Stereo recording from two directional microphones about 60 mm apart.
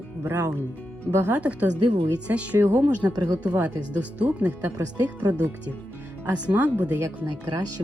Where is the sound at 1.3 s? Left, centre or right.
Right.